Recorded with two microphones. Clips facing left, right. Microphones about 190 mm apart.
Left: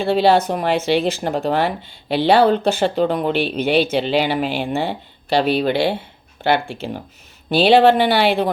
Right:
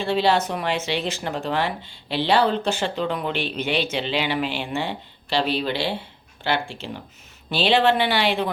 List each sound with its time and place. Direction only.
0.0 s speech: 55° left (ahead or behind)